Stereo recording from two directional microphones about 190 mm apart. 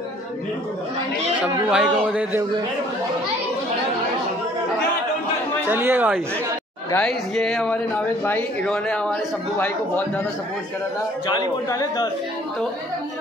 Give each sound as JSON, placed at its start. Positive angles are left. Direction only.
{"t": 1.7, "sound": "speech", "side_deg": -5}
{"t": 5.7, "sound": "speech", "side_deg": -10}
{"t": 6.9, "sound": "speech", "side_deg": 5}
{"t": 11.3, "sound": "speech", "side_deg": 20}